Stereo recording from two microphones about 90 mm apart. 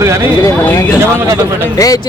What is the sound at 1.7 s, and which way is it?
Speech, 40° left (ahead or behind).